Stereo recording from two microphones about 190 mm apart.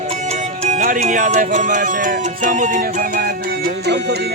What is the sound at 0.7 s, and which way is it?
Music, 40° right (ahead or behind).